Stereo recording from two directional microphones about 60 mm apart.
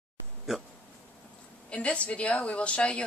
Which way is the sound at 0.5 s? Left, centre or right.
Centre.